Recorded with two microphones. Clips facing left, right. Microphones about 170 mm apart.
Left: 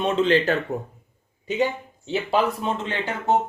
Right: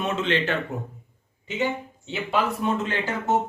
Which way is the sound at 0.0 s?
35° left (ahead or behind).